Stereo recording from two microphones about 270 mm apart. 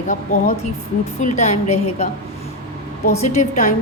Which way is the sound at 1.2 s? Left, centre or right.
Left.